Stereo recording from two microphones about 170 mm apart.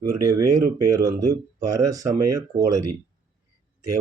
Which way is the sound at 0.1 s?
15° right (ahead or behind).